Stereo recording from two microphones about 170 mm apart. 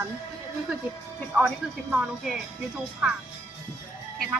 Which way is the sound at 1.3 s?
10° right (ahead or behind).